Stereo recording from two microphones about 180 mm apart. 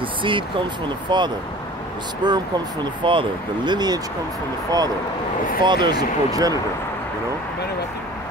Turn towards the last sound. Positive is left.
turn(degrees=-20)  # may be behind; listen again after turning